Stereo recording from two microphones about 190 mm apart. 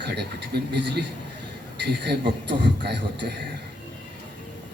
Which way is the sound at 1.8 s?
65° right (ahead or behind).